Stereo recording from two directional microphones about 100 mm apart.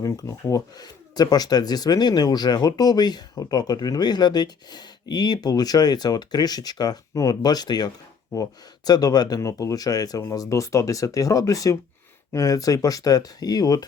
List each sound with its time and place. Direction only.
0.0 s speech: 30° left (ahead or behind)
0.8 s speech: 40° left (ahead or behind)